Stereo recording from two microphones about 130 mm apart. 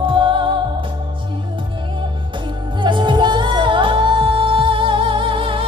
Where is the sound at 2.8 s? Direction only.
35° right (ahead or behind).